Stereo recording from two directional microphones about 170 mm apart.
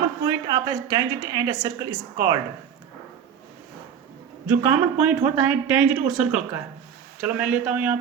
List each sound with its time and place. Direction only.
0.3 s a woman's voice: 20° right (ahead or behind)
4.4 s speech: 10° right (ahead or behind)